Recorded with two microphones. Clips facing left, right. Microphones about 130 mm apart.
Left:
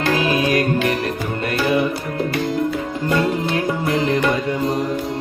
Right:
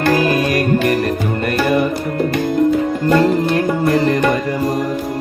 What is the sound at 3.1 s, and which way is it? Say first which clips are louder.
Music: right 5 dB; 45° right (ahead or behind).